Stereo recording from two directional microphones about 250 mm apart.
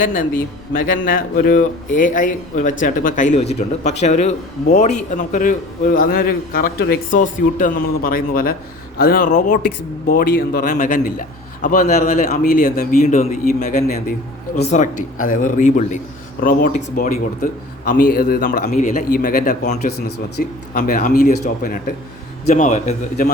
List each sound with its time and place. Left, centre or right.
0.0 s speech: left